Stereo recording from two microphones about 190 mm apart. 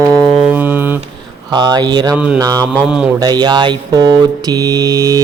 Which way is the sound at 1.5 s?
20° right (ahead or behind).